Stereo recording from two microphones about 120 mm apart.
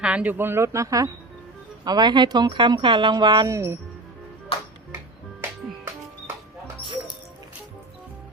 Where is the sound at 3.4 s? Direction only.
25° right (ahead or behind).